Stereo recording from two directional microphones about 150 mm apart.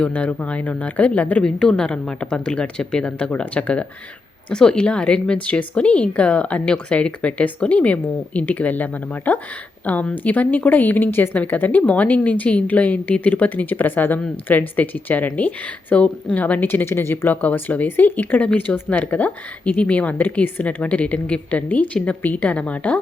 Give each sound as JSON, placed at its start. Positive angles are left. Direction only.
{"t": 0.0, "sound": "a woman's voice", "side_deg": 10}